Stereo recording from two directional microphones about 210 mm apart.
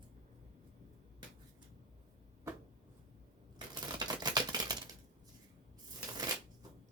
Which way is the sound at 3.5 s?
20° right (ahead or behind).